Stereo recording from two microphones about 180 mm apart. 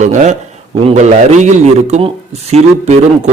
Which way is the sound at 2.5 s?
35° right (ahead or behind).